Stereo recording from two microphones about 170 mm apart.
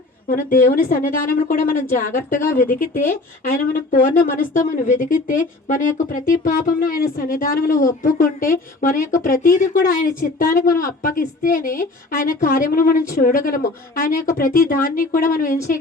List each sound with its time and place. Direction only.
0.3 s speech: 55° left (ahead or behind)